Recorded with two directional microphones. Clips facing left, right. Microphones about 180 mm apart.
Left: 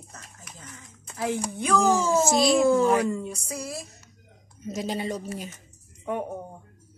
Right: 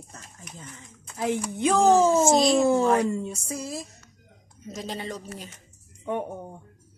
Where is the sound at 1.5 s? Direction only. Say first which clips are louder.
Right 4 dB; 20° right (ahead or behind).